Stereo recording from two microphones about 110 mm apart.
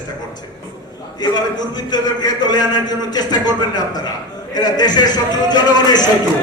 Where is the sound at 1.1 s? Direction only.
40° left (ahead or behind).